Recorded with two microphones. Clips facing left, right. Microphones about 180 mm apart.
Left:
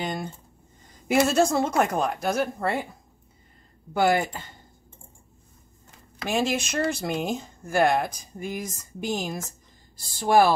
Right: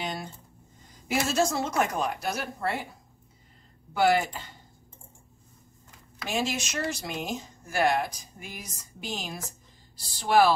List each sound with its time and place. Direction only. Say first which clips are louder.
1.0 s speech: left 6 dB; 55° left (ahead or behind)
3.9 s speech: left 1 dB; 50° left (ahead or behind)
6.2 s speech: left 5 dB; 55° left (ahead or behind)